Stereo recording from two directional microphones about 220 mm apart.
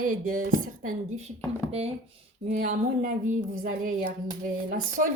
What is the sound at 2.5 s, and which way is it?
A woman's voice, 35° right (ahead or behind).